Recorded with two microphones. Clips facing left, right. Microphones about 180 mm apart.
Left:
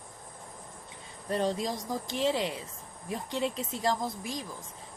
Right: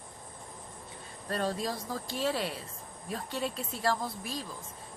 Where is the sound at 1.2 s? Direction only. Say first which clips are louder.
Left 3 dB; 20° left (ahead or behind).